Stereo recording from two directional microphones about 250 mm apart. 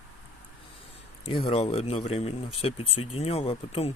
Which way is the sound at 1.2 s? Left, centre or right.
Left.